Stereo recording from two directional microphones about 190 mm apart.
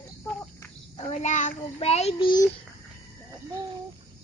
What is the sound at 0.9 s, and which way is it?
A child's voice, 40° left (ahead or behind).